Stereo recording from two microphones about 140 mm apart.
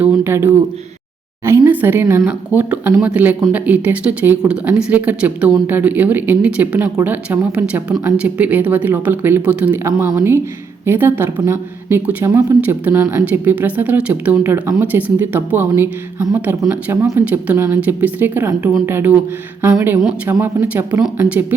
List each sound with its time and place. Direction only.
0.0 s speech: 15° right (ahead or behind)
20.2 s speech: 15° right (ahead or behind)